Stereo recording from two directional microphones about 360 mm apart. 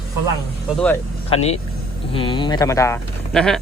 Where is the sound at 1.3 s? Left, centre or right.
Centre.